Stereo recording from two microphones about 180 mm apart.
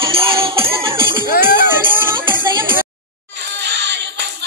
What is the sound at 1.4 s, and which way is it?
Music, 10° right (ahead or behind).